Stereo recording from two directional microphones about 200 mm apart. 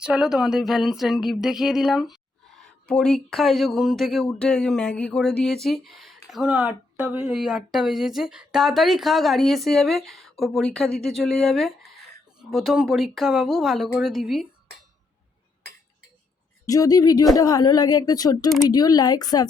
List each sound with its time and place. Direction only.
0.0 s speech: 5° right (ahead or behind)
16.6 s a woman's voice: 15° left (ahead or behind)